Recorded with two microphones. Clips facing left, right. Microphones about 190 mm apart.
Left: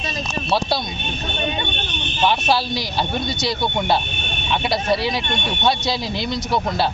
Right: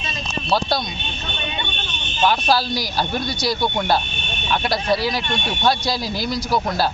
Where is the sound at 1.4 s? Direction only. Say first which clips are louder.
Left 5 dB; 40° left (ahead or behind).